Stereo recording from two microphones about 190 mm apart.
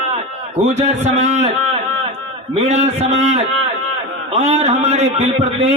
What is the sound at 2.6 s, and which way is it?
A man's voice, 35° right (ahead or behind).